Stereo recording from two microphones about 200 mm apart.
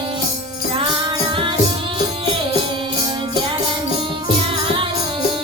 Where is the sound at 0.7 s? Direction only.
25° right (ahead or behind).